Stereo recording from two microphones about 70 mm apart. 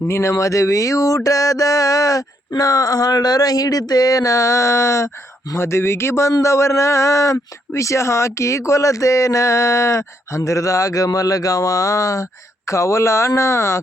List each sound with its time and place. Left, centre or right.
0.1 s speech: left